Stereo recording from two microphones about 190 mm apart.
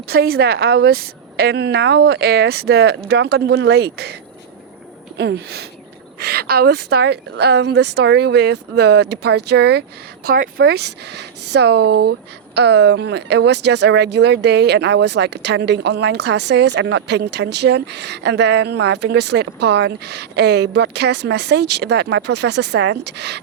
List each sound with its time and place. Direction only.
0.1 s speech: 55° right (ahead or behind)
5.1 s speech: 60° right (ahead or behind)